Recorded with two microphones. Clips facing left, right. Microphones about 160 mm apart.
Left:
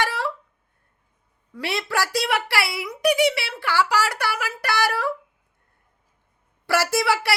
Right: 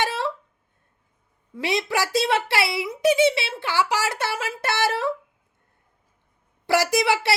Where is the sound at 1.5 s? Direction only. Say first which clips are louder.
Right 1 dB; 20° right (ahead or behind).